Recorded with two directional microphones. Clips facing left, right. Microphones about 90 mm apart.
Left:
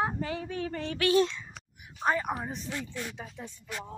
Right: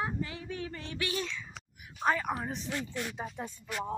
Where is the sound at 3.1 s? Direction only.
40° right (ahead or behind).